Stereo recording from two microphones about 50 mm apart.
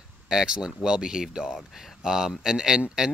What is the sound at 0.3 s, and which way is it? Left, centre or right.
Speech, centre.